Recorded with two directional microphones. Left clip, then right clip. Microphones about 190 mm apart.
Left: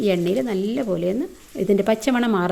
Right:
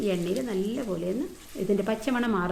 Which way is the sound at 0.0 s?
50° left (ahead or behind).